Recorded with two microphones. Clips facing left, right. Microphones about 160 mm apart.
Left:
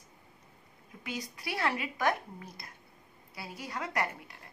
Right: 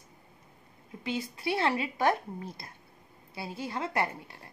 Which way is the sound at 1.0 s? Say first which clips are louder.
Right 7 dB; 25° right (ahead or behind).